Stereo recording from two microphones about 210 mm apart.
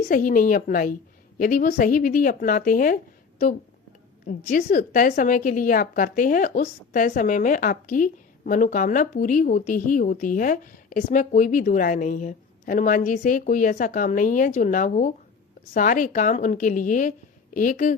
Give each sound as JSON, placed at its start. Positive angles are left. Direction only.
{"t": 0.1, "sound": "a woman's voice", "side_deg": 40}
{"t": 4.3, "sound": "a woman's voice", "side_deg": 40}